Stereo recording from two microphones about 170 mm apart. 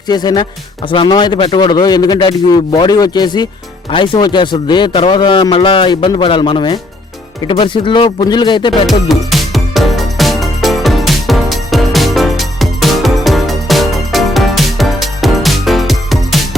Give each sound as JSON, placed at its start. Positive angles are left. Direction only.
{"t": 0.1, "sound": "a man's voice", "side_deg": 25}
{"t": 9.0, "sound": "music", "side_deg": 0}